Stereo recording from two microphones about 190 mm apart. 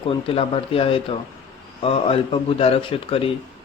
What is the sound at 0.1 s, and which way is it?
A man's voice, 30° left (ahead or behind).